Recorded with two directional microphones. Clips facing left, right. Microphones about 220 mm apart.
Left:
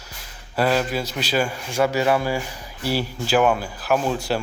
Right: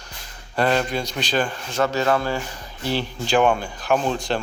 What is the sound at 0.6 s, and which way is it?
A man's voice, 5° left (ahead or behind).